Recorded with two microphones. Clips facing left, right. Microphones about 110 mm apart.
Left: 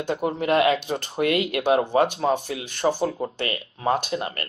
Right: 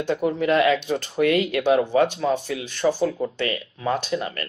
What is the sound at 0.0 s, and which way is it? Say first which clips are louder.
Speech: right 2 dB; 45° left (ahead or behind).